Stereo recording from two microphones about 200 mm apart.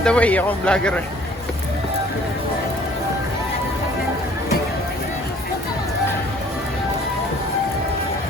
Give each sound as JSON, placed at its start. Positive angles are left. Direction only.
{"t": 0.0, "sound": "speech", "side_deg": 5}